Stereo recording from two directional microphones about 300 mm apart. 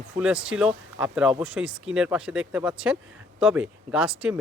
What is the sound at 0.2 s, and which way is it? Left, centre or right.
Speech, centre.